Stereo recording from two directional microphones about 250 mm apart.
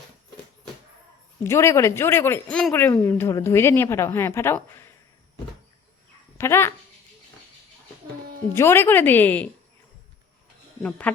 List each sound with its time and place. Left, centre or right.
1.5 s speech: centre
6.3 s speech: centre
8.5 s speech: centre
10.8 s speech: centre